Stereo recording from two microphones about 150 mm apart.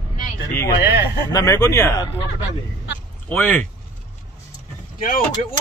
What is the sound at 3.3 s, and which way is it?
Speech, 15° left (ahead or behind).